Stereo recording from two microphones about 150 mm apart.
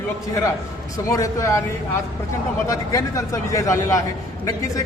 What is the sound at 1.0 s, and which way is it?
Speech, 20° left (ahead or behind).